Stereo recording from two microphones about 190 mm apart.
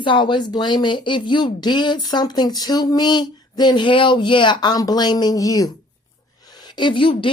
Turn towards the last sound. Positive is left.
turn(degrees=25)  # may be behind; listen again after turning